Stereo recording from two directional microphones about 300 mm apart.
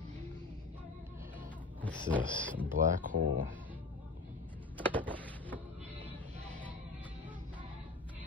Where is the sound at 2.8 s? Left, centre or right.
Right.